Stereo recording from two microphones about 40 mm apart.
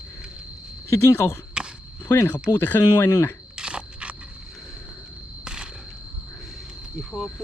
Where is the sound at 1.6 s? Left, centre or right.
Right.